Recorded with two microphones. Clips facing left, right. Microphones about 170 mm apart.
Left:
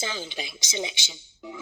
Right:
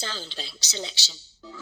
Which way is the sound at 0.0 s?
15° left (ahead or behind).